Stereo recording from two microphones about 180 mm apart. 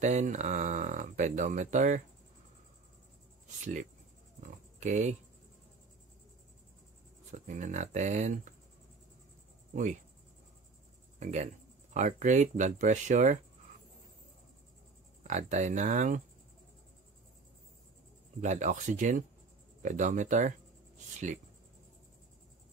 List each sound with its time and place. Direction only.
0.0 s speech: 40° right (ahead or behind)
4.4 s pig: 40° right (ahead or behind)
7.2 s speech: 40° right (ahead or behind)
11.1 s speech: 40° right (ahead or behind)
15.2 s speech: 40° right (ahead or behind)
18.4 s speech: 40° right (ahead or behind)